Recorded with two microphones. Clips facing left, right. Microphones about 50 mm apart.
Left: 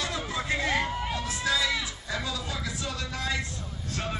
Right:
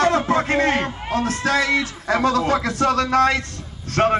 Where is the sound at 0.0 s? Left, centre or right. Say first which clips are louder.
Right 14 dB; right.